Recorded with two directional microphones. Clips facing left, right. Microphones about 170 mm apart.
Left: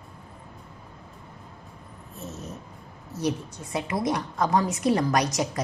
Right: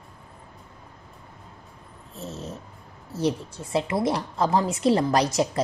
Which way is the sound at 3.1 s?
30° right (ahead or behind).